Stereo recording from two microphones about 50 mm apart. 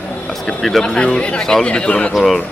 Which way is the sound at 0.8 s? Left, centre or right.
Centre.